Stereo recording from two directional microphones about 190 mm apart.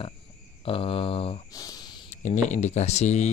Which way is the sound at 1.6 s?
20° left (ahead or behind).